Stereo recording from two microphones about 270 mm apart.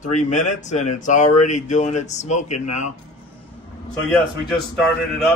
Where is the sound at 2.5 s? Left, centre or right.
Left.